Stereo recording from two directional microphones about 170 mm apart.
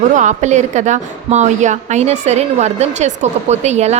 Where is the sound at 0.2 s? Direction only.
45° right (ahead or behind).